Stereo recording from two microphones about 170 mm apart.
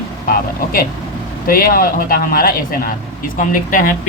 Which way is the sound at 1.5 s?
55° left (ahead or behind).